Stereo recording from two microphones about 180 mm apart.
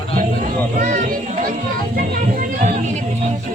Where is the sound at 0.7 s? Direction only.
45° right (ahead or behind).